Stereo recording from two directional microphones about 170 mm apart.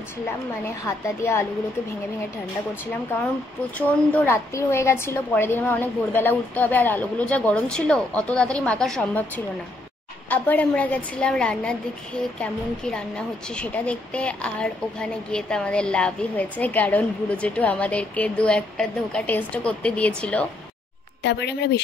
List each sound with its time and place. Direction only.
0.8 s a woman's voice: 15° left (ahead or behind)
3.8 s a woman's voice: 10° left (ahead or behind)
10.3 s a woman's voice: 10° left (ahead or behind)
21.2 s speech: 90° left